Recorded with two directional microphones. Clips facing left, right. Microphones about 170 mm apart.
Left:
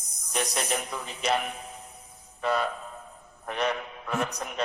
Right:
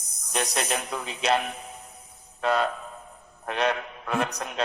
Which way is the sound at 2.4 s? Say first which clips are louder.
Right 3 dB; 65° right (ahead or behind).